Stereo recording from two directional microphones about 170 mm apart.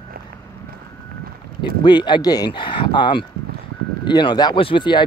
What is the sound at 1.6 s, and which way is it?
Speech, 25° left (ahead or behind).